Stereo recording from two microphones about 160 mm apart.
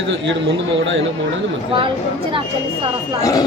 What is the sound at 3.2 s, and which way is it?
Speech, 20° left (ahead or behind).